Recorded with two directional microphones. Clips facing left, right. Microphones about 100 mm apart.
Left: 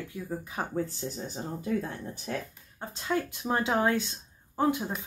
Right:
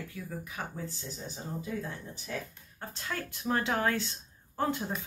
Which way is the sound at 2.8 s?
20° left (ahead or behind).